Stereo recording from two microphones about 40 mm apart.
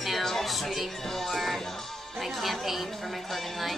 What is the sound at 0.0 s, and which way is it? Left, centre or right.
Music, centre.